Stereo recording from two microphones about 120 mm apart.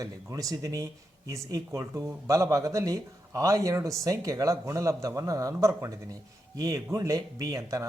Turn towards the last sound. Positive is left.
turn(degrees=-25)  # may be behind; listen again after turning